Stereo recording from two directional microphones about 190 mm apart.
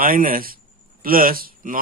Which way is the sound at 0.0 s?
50° right (ahead or behind).